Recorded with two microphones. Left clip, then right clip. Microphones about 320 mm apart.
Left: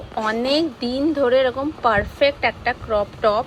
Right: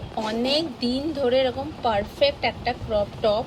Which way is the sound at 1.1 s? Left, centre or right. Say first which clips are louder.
Left 4 dB; centre.